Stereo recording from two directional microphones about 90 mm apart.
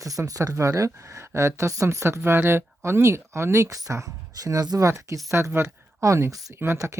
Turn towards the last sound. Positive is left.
turn(degrees=-30)  # may be behind; listen again after turning